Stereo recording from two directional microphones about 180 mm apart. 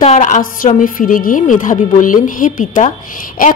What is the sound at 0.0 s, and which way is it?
A woman's voice, 40° left (ahead or behind).